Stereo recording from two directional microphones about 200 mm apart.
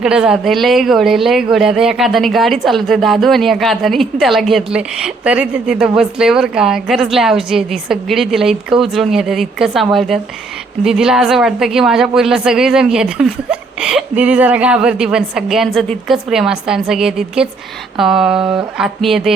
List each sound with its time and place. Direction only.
0.0 s speech: 5° right (ahead or behind)